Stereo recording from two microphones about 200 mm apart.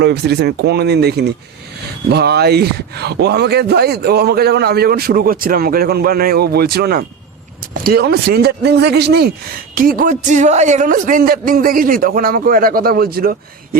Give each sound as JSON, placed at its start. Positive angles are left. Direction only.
{"t": 0.0, "sound": "speech", "side_deg": -55}